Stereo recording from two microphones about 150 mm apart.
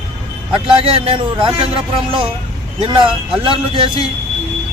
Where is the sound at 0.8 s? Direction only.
40° right (ahead or behind).